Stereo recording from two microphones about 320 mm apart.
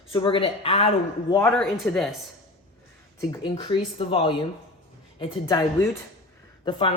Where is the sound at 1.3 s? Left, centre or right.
Centre.